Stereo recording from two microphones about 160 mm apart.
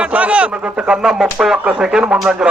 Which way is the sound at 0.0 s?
10° right (ahead or behind).